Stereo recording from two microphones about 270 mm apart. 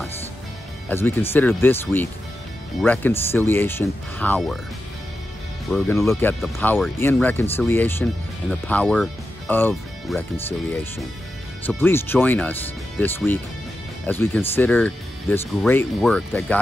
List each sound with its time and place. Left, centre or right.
0.8 s speech: centre
5.7 s speech: centre